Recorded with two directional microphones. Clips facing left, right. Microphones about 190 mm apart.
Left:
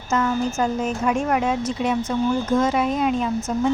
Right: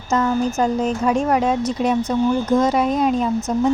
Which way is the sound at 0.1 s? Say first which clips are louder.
Right 3 dB; 35° right (ahead or behind).